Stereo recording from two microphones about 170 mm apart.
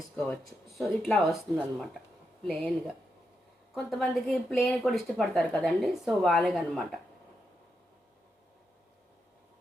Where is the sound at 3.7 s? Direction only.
Centre (ahead or behind).